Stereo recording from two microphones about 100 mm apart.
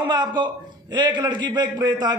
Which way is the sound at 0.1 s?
45° right (ahead or behind).